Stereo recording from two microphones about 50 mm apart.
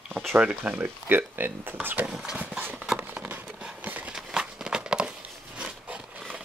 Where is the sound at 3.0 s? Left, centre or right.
Right.